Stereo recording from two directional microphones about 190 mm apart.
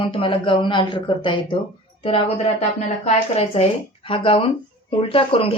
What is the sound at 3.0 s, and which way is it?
A woman's voice, 30° left (ahead or behind).